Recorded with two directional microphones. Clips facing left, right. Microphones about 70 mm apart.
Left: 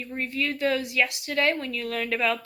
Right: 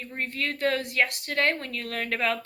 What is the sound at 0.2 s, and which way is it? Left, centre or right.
Speech, right.